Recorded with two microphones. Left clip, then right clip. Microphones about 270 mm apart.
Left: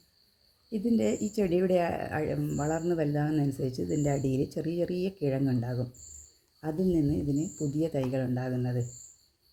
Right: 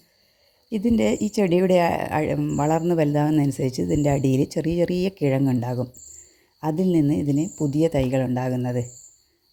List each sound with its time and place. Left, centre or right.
0.7 s speech: right